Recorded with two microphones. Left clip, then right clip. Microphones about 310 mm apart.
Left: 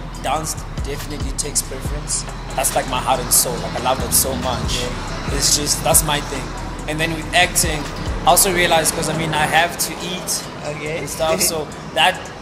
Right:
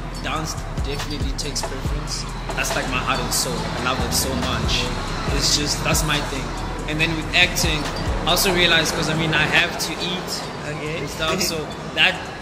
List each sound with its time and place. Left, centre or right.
2.6 s speech: left
11.2 s speech: left